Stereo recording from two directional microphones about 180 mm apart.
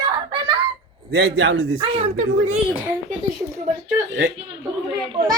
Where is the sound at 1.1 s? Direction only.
60° right (ahead or behind).